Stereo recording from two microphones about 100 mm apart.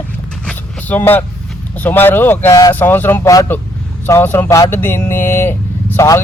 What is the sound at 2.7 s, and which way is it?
Speech, 20° left (ahead or behind).